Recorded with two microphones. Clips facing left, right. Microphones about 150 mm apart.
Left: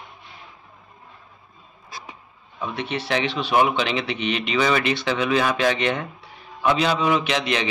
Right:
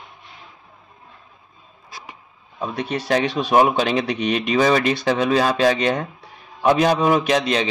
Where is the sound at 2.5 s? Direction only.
35° right (ahead or behind).